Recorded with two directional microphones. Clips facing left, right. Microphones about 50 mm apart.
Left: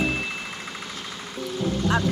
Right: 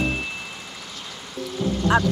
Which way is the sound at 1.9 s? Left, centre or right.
Right.